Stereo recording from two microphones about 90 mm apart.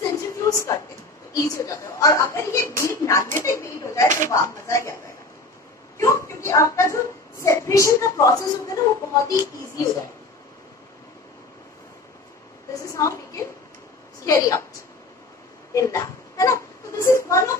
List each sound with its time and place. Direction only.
0.1 s a sound: 35° left (ahead or behind)
1.3 s a woman's voice: 35° left (ahead or behind)
5.9 s a woman's voice: 35° left (ahead or behind)
12.8 s a sound: 35° left (ahead or behind)
14.2 s a woman's voice: 35° left (ahead or behind)
15.7 s a child's voice: 40° left (ahead or behind)